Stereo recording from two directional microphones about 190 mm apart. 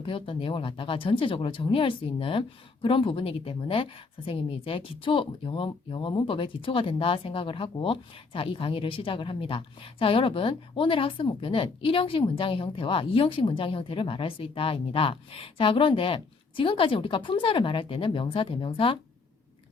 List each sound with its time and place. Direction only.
0.0 s speech: 30° left (ahead or behind)